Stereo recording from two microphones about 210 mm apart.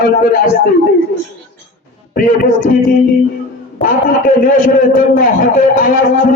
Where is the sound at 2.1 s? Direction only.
40° left (ahead or behind).